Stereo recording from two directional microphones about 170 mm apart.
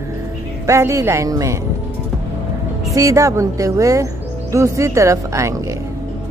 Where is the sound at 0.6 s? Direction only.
15° right (ahead or behind).